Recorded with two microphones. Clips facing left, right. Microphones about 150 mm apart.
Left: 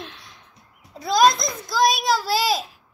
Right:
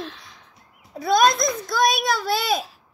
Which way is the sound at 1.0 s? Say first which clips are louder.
Even; 60° right (ahead or behind).